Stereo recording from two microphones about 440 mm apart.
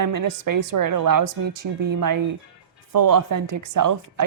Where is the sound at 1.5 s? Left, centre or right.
Right.